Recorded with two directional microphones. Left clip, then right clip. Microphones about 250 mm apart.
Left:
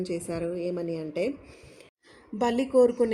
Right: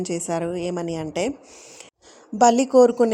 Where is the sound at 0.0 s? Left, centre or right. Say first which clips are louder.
Right 6 dB; right.